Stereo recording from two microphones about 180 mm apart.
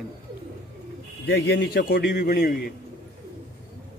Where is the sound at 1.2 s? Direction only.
75° left (ahead or behind); by 2.6 s 55° left (ahead or behind).